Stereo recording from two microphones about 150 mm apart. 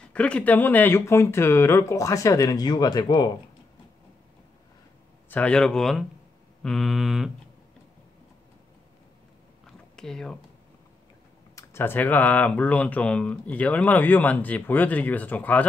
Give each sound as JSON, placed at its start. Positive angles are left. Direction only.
{"t": 0.1, "sound": "speech", "side_deg": 10}
{"t": 5.3, "sound": "speech", "side_deg": 5}
{"t": 9.7, "sound": "a sound", "side_deg": 5}
{"t": 11.5, "sound": "speech", "side_deg": 15}